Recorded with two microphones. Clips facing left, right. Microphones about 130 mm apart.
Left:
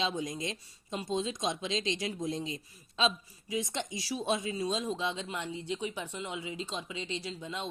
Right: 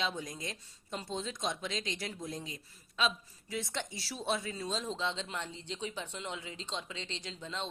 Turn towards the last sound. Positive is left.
turn(degrees=10)  # may be behind; listen again after turning